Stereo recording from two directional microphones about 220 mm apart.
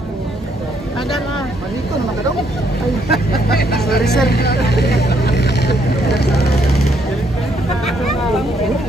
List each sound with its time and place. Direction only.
3.1 s speech: 45° left (ahead or behind)
4.0 s speech: centre (ahead or behind)
4.3 s speech: 45° left (ahead or behind)